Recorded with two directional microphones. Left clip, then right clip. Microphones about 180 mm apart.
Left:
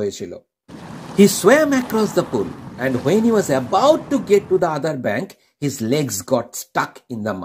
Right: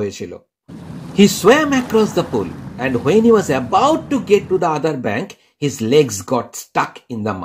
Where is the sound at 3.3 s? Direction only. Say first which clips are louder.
Right 3 dB; 25° left (ahead or behind).